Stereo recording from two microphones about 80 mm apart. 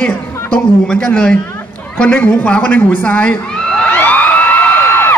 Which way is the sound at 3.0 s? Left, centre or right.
Centre.